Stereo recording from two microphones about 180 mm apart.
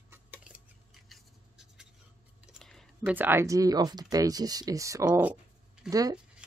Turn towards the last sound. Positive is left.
turn(degrees=-20)  # may be behind; listen again after turning